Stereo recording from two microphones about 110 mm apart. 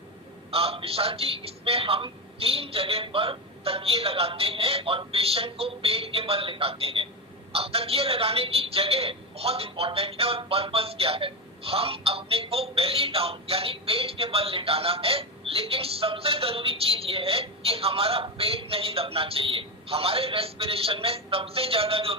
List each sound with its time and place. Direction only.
0.5 s a woman's voice: 60° right (ahead or behind)